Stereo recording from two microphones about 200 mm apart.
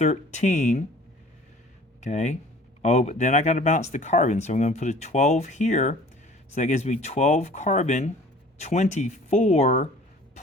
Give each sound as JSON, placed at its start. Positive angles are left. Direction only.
{"t": 0.0, "sound": "speech", "side_deg": 35}
{"t": 2.0, "sound": "speech", "side_deg": 35}